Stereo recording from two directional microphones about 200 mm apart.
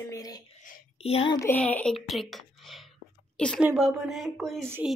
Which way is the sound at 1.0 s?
30° left (ahead or behind).